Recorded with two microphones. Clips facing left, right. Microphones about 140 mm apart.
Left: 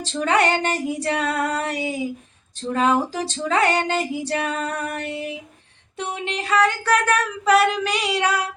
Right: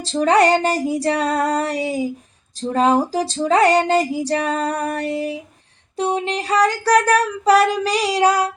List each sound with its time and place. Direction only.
0.0 s female singing: 35° right (ahead or behind)